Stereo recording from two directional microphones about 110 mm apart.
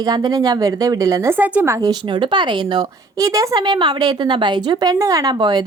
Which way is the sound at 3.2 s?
30° right (ahead or behind).